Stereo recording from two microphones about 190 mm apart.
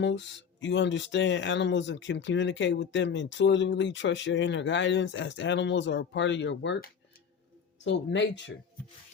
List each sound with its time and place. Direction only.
0.0 s speech: 70° left (ahead or behind)